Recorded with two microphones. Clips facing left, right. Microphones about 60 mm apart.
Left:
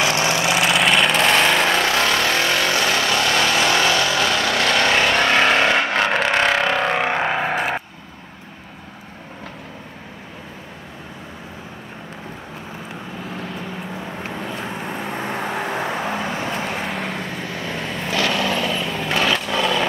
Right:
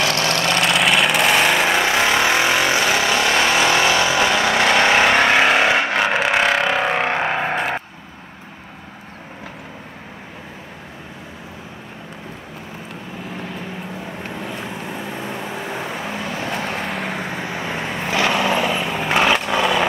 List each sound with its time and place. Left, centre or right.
0.0 s vehicle: centre
13.9 s vehicle: centre
15.3 s vehicle: left
16.1 s vehicle: left
16.5 s vehicle: centre
17.2 s vehicle: centre